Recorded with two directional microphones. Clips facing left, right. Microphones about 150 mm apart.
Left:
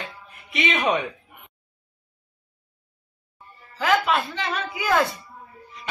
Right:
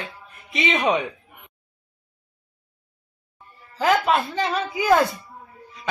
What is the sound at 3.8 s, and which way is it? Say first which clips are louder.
Speech: right 2 dB; 40° right (ahead or behind).